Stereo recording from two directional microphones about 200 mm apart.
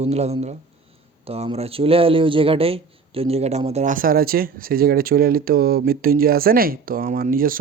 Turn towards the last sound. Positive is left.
turn(degrees=-45)  # may be behind; listen again after turning